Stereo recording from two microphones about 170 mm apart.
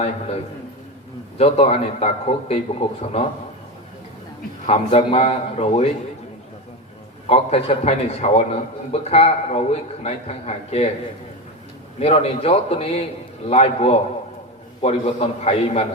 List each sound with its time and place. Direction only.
1.4 s a man's voice: 35° left (ahead or behind)
4.6 s a man's voice: 40° left (ahead or behind)
7.3 s a man's voice: 35° left (ahead or behind)
11.9 s a man's voice: 40° left (ahead or behind)